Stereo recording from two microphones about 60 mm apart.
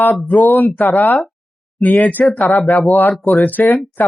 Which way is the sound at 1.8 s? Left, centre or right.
Left.